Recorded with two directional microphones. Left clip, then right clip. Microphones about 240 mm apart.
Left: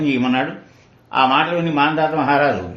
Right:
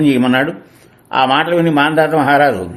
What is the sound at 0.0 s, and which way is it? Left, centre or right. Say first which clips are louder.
A man's voice: right 6 dB; right.